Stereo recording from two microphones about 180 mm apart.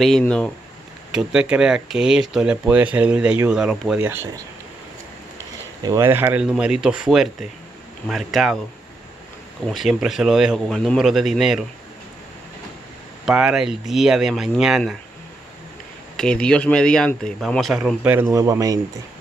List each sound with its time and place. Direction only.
0.0 s speech: 5° left (ahead or behind)
1.1 s speech: 5° right (ahead or behind)
5.8 s speech: 20° right (ahead or behind); by 8.5 s centre (ahead or behind)
9.7 s speech: centre (ahead or behind)
13.2 s speech: 5° right (ahead or behind)
16.2 s speech: 5° left (ahead or behind)
18.3 s speech: 20° right (ahead or behind)